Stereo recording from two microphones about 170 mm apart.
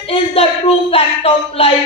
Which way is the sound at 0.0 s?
35° left (ahead or behind).